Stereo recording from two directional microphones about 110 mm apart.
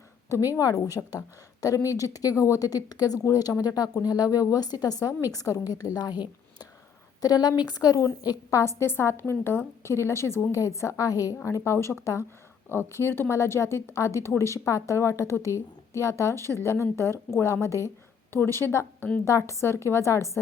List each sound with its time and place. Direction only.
0.3 s a woman's voice: 25° left (ahead or behind)